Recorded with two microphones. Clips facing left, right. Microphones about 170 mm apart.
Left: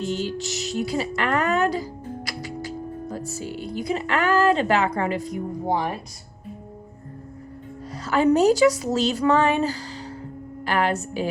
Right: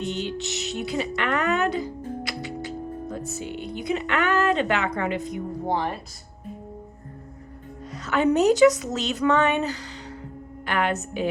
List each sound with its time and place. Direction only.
0.1 s music: 40° left (ahead or behind)
3.7 s speech: 35° left (ahead or behind)
5.5 s speech: 15° left (ahead or behind)
8.0 s speech: 35° left (ahead or behind)